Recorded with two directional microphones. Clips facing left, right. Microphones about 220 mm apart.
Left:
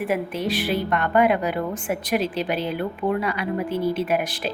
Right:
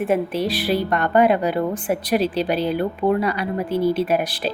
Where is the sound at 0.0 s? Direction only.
30° right (ahead or behind).